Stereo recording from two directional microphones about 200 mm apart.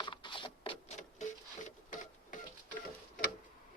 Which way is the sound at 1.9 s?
40° left (ahead or behind).